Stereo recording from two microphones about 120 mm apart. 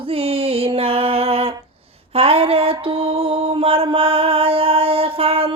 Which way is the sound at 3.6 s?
50° right (ahead or behind).